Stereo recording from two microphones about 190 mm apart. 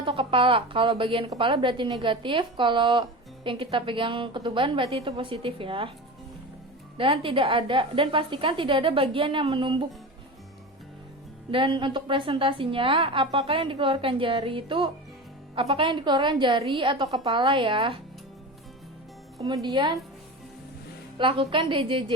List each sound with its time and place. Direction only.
0.0 s a woman's voice: 25° right (ahead or behind)
6.9 s a woman's voice: 30° right (ahead or behind)
11.5 s a woman's voice: 25° right (ahead or behind)
19.4 s a woman's voice: 20° right (ahead or behind)
21.2 s a woman's voice: 25° right (ahead or behind)